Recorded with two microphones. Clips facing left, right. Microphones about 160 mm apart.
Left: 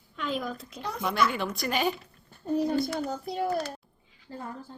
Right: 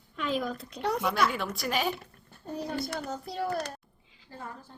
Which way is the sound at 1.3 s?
Centre (ahead or behind).